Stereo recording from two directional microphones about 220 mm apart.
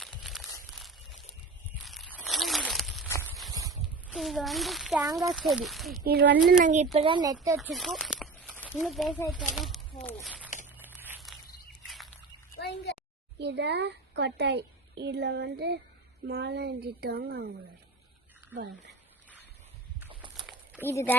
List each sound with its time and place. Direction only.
0.0 s a sound: centre (ahead or behind)
3.1 s clip-clop: 15° left (ahead or behind)
3.5 s a sound: 15° right (ahead or behind)
4.1 s a child's voice: centre (ahead or behind)
6.1 s a woman's voice: 45° right (ahead or behind)
6.6 s speech: 35° right (ahead or behind)
6.9 s speech: 25° right (ahead or behind)
7.7 s speech: centre (ahead or behind)
10.2 s a sound: 5° right (ahead or behind)
12.5 s a sound: 50° left (ahead or behind)
13.4 s a woman's voice: 50° right (ahead or behind)
20.1 s walk: 20° right (ahead or behind)
20.8 s speech: 10° left (ahead or behind)